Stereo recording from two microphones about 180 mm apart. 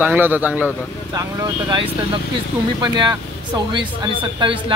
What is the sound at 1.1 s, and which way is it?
Speech, 25° right (ahead or behind).